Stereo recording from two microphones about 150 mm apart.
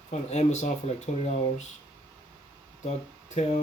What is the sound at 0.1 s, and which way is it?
Speech, 50° left (ahead or behind).